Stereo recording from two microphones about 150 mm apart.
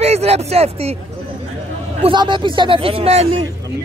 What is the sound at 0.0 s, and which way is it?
Speech, 45° right (ahead or behind).